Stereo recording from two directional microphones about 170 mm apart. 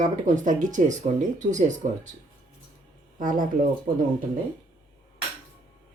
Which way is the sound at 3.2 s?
50° right (ahead or behind).